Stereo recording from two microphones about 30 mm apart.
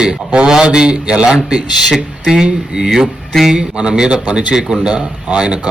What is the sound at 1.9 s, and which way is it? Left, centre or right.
Speech, centre.